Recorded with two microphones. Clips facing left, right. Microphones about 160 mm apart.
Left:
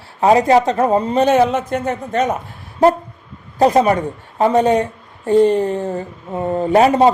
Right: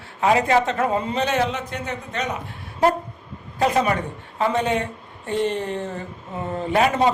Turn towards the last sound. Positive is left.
turn(degrees=35)  # may be behind; listen again after turning